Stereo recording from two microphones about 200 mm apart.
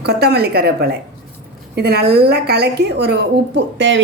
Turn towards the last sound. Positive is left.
turn(degrees=-65)  # may be behind; listen again after turning